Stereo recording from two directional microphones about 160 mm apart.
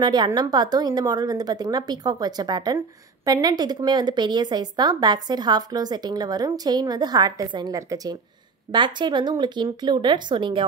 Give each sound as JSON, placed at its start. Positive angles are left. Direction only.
{"t": 0.0, "sound": "speech", "side_deg": -25}